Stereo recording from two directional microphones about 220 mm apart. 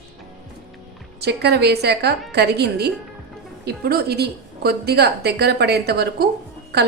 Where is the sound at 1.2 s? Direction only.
50° right (ahead or behind).